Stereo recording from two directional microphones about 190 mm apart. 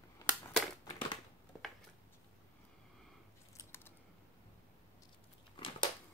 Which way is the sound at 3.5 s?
15° left (ahead or behind).